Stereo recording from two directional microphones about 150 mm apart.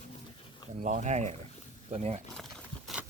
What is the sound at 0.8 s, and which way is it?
Speech, 55° right (ahead or behind).